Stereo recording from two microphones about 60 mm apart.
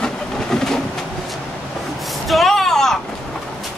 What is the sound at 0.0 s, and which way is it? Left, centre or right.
Vehicle, centre.